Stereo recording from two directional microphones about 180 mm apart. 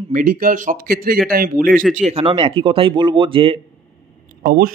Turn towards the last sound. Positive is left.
turn(degrees=-55)  # may be behind; listen again after turning